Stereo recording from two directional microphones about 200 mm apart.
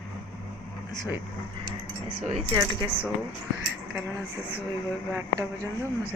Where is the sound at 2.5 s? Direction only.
25° right (ahead or behind).